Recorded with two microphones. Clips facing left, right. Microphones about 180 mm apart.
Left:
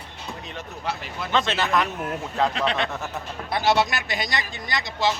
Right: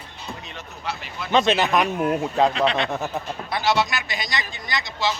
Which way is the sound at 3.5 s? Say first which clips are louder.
Left 1 dB; 55° left (ahead or behind).